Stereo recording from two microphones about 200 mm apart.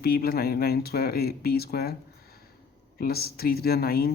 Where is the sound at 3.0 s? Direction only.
50° left (ahead or behind).